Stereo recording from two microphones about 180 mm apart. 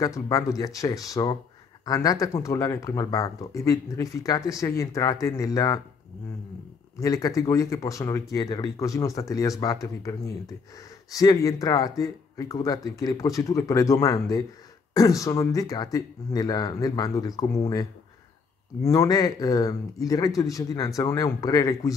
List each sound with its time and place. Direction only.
0.0 s speech: 20° left (ahead or behind)
7.0 s speech: 20° left (ahead or behind)